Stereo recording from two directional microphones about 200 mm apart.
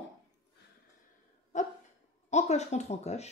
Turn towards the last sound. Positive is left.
turn(degrees=35)  # may be behind; listen again after turning